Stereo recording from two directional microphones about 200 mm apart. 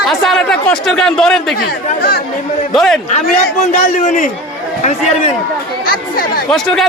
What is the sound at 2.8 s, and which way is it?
Speech, centre (ahead or behind).